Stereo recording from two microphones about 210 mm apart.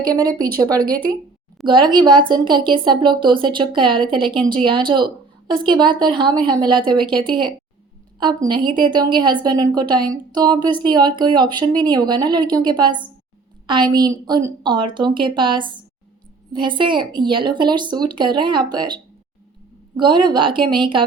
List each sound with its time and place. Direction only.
0.0 s speech: 20° right (ahead or behind)
0.3 s speech: 45° right (ahead or behind)
1.6 s a woman's voice: 20° right (ahead or behind)
20.0 s a woman's voice: 20° right (ahead or behind)